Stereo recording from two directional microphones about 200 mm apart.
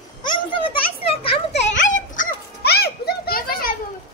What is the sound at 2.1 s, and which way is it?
Children playing, 45° left (ahead or behind).